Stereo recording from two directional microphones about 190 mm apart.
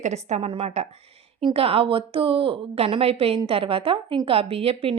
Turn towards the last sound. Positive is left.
turn(degrees=-30)  # may be behind; listen again after turning